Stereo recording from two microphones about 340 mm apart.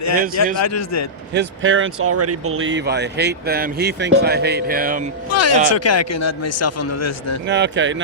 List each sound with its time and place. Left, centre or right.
0.6 s a man's voice: left
1.3 s speech: right
5.3 s a man's voice: left
7.4 s speech: right